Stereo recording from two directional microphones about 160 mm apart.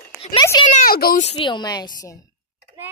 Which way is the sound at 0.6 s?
65° left (ahead or behind).